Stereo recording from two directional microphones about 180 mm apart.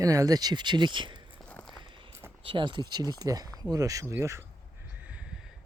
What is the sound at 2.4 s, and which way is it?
Speech, 30° right (ahead or behind).